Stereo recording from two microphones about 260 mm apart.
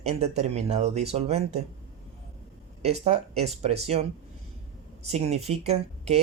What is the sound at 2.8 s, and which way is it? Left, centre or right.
Speech, right.